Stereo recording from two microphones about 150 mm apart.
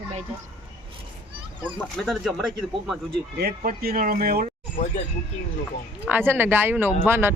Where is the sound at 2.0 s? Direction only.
Centre (ahead or behind).